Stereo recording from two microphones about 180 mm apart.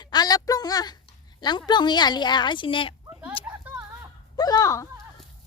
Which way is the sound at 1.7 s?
25° left (ahead or behind).